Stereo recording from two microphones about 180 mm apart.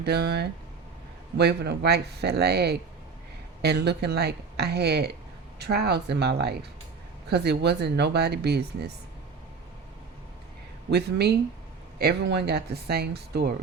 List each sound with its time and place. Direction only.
0.0 s speech: 65° right (ahead or behind)
10.9 s speech: 65° right (ahead or behind)